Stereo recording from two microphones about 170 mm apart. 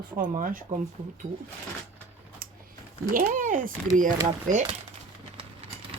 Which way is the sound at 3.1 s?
50° right (ahead or behind).